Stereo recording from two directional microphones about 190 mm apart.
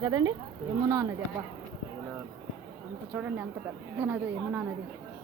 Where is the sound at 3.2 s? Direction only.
10° right (ahead or behind).